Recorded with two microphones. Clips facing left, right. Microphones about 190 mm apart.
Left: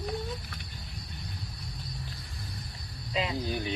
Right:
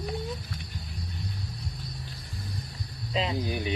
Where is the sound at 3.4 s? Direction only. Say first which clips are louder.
Right 1 dB; 15° right (ahead or behind).